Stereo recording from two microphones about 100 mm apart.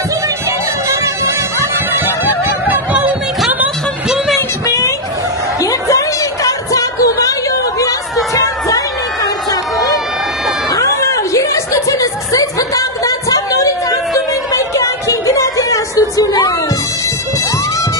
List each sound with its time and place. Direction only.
0.8 s music: 30° right (ahead or behind)
2.7 s music: 15° right (ahead or behind)
4.6 s chatter: 30° left (ahead or behind)
5.6 s music: 35° left (ahead or behind)
8.4 s crowd: 35° left (ahead or behind)
10.7 s a sound: 30° left (ahead or behind)
14.5 s music: 30° left (ahead or behind)